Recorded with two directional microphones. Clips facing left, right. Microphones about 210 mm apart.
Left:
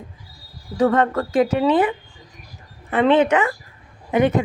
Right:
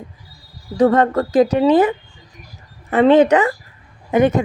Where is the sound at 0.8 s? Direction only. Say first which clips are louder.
Right 4 dB; 35° right (ahead or behind).